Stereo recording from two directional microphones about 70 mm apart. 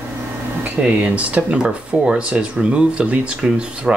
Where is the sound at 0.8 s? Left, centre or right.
Centre.